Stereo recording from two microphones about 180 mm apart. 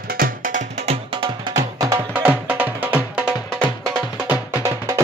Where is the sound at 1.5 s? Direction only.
15° right (ahead or behind).